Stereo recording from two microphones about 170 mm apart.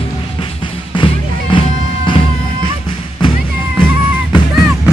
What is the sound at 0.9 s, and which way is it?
Music, 30° left (ahead or behind).